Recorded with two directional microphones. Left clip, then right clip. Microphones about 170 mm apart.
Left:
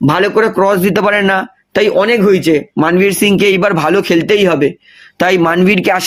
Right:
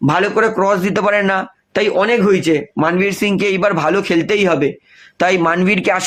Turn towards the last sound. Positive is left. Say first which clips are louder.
# left 4 dB
turn(degrees=35)  # may be behind; listen again after turning